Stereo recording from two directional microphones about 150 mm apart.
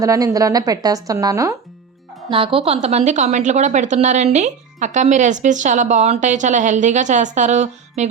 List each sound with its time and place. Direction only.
0.0 s a woman's voice: 20° right (ahead or behind)
2.3 s a woman's voice: 35° right (ahead or behind); by 8.0 s 50° right (ahead or behind)